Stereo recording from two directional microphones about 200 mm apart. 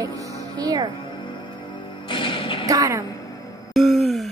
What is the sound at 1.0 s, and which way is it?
Music, 25° left (ahead or behind).